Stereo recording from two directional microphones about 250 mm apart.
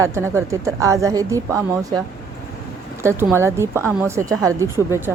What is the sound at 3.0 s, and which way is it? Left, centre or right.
A woman's voice, centre.